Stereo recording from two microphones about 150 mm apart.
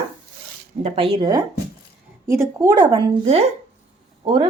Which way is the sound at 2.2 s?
20° right (ahead or behind).